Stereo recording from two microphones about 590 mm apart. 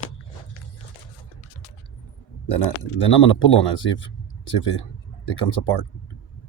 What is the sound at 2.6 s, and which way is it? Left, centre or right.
Speech, left.